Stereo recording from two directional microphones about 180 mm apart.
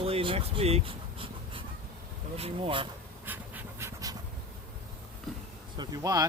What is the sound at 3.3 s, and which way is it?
Pant, 15° right (ahead or behind).